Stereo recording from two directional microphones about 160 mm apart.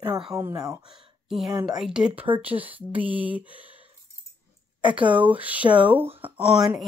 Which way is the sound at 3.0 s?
35° right (ahead or behind).